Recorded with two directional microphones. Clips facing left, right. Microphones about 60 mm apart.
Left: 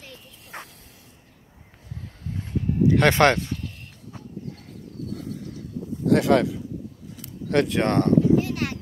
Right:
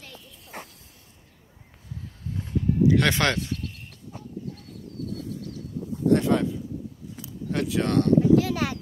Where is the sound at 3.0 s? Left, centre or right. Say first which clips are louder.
Left 5 dB; left.